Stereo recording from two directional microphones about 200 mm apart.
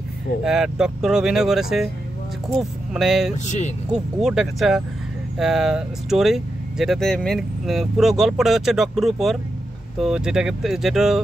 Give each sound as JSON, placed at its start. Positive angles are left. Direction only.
{"t": 0.4, "sound": "speech", "side_deg": -5}
{"t": 3.4, "sound": "speech", "side_deg": 35}
{"t": 3.9, "sound": "speech", "side_deg": -5}